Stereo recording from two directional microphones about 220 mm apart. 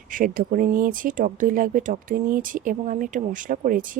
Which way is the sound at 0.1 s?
40° right (ahead or behind).